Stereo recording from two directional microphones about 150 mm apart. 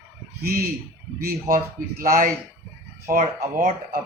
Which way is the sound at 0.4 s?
90° right.